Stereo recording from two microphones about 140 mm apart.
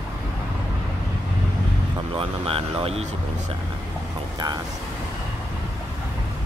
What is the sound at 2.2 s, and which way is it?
Speech, 40° right (ahead or behind).